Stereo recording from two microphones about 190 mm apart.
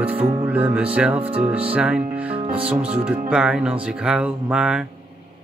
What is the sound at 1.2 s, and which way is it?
Speech, 30° right (ahead or behind).